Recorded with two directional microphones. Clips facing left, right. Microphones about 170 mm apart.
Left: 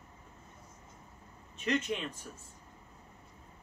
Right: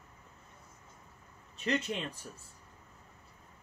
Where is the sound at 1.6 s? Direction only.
35° right (ahead or behind).